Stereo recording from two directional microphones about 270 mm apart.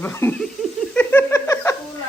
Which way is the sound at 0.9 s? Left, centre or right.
Centre.